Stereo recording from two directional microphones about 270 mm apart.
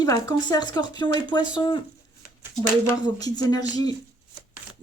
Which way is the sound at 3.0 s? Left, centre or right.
Centre.